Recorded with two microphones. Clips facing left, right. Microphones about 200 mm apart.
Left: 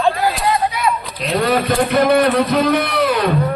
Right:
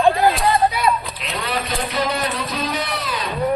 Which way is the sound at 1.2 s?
40° left (ahead or behind).